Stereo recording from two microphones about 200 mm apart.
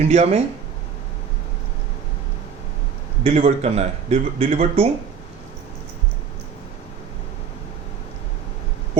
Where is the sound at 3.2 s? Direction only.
30° right (ahead or behind).